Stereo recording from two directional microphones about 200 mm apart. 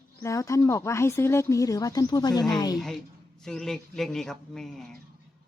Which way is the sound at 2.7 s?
Centre (ahead or behind).